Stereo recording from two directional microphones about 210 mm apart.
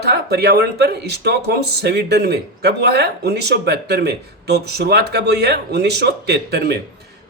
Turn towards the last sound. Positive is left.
turn(degrees=-50)  # may be behind; listen again after turning